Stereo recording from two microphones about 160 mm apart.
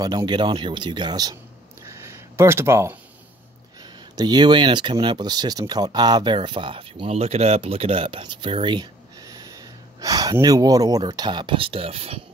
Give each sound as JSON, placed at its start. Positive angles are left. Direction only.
{"t": 0.0, "sound": "speech", "side_deg": -25}
{"t": 1.9, "sound": "a sound", "side_deg": -15}
{"t": 4.2, "sound": "speech", "side_deg": -25}